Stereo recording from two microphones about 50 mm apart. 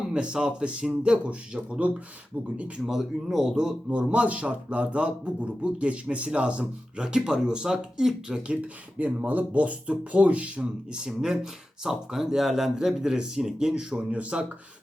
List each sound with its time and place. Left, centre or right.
0.1 s speech: centre
2.8 s speech: centre
3.8 s speech: right
9.0 s speech: right
10.9 s speech: centre
14.1 s speech: right